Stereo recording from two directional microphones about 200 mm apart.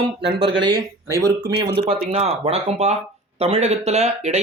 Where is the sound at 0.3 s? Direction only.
55° right (ahead or behind).